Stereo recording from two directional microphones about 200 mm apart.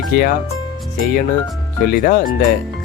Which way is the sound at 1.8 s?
45° left (ahead or behind).